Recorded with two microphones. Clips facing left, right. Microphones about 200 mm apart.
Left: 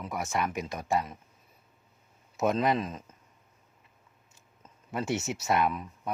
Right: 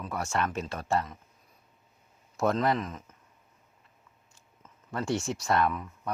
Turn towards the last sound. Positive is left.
turn(degrees=15)  # may be behind; listen again after turning